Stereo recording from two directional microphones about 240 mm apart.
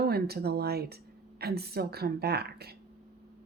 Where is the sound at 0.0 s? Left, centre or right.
Right.